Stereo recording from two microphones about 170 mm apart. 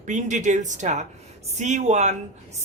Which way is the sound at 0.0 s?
45° right (ahead or behind).